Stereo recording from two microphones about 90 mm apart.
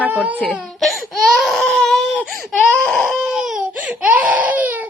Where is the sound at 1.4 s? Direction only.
5° left (ahead or behind).